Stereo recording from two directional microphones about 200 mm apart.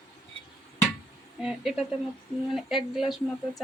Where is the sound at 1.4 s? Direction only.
Centre (ahead or behind).